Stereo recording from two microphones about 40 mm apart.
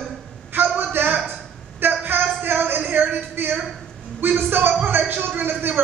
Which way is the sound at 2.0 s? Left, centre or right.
Right.